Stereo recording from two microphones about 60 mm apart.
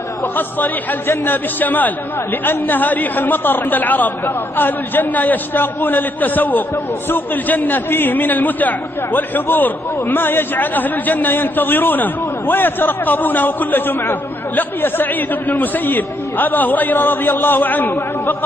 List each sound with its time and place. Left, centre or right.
0.4 s a man's voice: left